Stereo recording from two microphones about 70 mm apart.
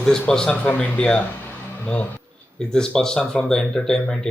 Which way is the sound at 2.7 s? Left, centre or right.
Centre.